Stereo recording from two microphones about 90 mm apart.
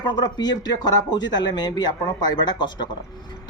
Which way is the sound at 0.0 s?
55° left (ahead or behind).